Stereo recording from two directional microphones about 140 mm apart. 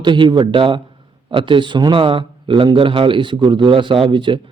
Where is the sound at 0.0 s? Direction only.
35° right (ahead or behind).